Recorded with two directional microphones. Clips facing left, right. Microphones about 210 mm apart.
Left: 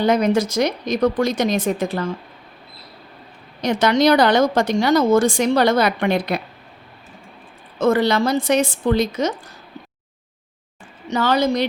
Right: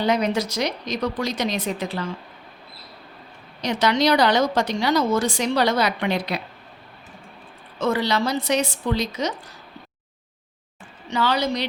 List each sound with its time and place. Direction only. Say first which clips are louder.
0.0 s a woman's voice: left 5 dB; 50° left (ahead or behind)
3.6 s a woman's voice: left 4 dB; 50° left (ahead or behind)
7.8 s a woman's voice: left 5 dB; 50° left (ahead or behind)
11.1 s a woman's voice: left 4 dB; 45° left (ahead or behind)